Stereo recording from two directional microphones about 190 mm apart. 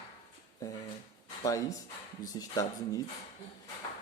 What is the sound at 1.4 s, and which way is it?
Speech, 15° left (ahead or behind).